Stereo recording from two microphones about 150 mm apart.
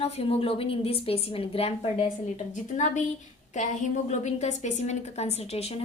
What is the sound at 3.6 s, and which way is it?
A woman's voice, 55° left (ahead or behind).